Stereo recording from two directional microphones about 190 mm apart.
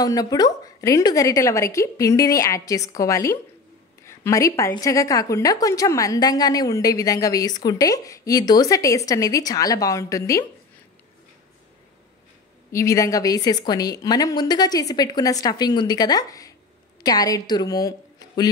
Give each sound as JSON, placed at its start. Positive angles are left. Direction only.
{"t": 0.0, "sound": "a woman's voice", "side_deg": 20}
{"t": 12.7, "sound": "a woman's voice", "side_deg": 15}